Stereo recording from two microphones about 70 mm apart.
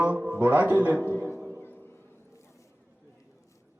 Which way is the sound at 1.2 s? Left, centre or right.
Right.